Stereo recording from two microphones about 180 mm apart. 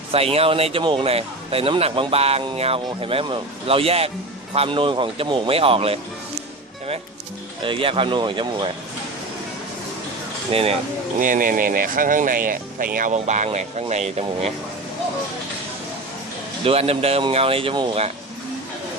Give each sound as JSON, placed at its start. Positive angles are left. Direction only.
{"t": 0.1, "sound": "speech", "side_deg": -35}
{"t": 7.6, "sound": "speech", "side_deg": -30}
{"t": 10.5, "sound": "speech", "side_deg": -30}
{"t": 11.2, "sound": "speech", "side_deg": -50}
{"t": 16.6, "sound": "speech", "side_deg": -35}